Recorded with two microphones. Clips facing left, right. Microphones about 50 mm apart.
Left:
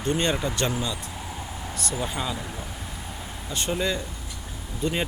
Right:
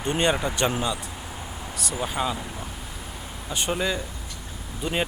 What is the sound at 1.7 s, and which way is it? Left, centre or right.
Speech, centre.